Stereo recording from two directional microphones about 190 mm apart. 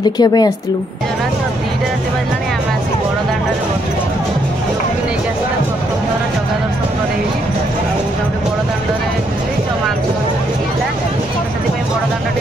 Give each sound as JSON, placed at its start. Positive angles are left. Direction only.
{"t": 0.2, "sound": "a woman's voice", "side_deg": 20}